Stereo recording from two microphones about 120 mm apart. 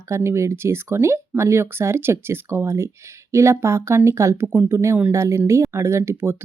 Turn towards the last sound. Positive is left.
turn(degrees=-20)  # may be behind; listen again after turning